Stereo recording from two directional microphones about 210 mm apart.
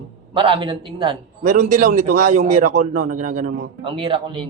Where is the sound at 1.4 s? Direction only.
40° right (ahead or behind).